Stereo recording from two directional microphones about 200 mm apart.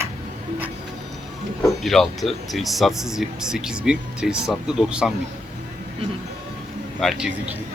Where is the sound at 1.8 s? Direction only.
Centre (ahead or behind).